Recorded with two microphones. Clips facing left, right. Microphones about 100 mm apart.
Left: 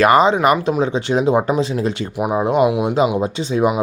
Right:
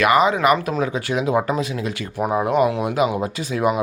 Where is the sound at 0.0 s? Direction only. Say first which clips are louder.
Left 4 dB; 35° left (ahead or behind).